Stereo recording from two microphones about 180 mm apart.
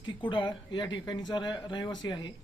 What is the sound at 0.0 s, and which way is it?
Speech, 25° left (ahead or behind).